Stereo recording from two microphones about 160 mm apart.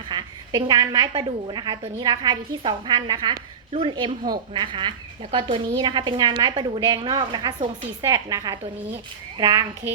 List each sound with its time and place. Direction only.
0.1 s a woman's voice: 30° right (ahead or behind)